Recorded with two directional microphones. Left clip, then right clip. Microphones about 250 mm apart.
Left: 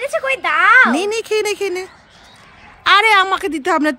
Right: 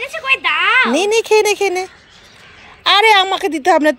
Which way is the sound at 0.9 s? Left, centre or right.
Centre.